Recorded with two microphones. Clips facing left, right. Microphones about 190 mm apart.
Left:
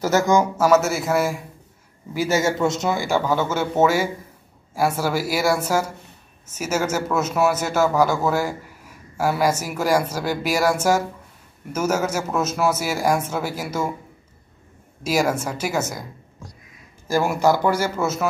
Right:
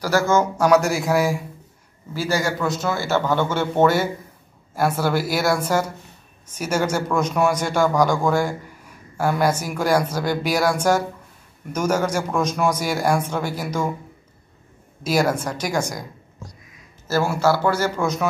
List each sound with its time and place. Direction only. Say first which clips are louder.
0.0 s a man's voice: left 1 dB; 20° left (ahead or behind)
0.6 s a man's voice: even; centre (ahead or behind)
2.1 s a man's voice: left 2 dB; 20° left (ahead or behind)
15.0 s a man's voice: right 1 dB; 10° left (ahead or behind)
17.1 s a man's voice: left 1 dB; 15° left (ahead or behind)